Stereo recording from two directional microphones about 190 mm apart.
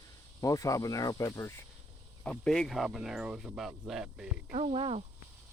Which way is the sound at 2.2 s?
5° left (ahead or behind).